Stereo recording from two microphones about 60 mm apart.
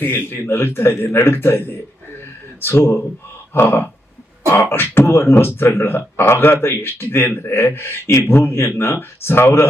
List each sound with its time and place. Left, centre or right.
0.0 s speech: left
2.2 s a sound: left
3.5 s speech: left